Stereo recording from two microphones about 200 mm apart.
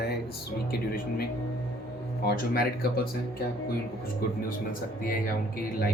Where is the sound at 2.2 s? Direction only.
50° left (ahead or behind).